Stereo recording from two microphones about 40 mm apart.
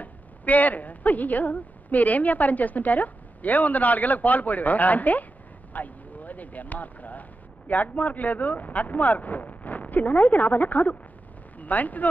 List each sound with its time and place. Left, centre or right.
0.0 s speech: left